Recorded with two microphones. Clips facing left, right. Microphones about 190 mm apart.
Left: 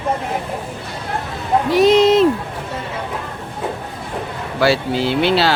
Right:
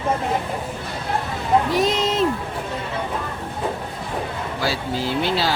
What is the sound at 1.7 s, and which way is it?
Speech, 70° left (ahead or behind).